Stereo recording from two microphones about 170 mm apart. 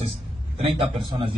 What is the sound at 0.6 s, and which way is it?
Speech, 35° right (ahead or behind).